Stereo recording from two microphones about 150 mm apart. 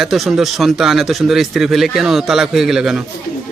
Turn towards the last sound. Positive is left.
turn(degrees=-5)  # may be behind; listen again after turning